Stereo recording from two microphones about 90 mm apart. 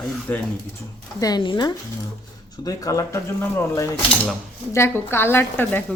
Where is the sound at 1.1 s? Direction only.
45° left (ahead or behind).